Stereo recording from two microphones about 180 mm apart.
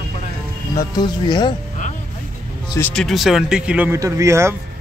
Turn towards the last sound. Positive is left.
turn(degrees=-15)  # may be behind; listen again after turning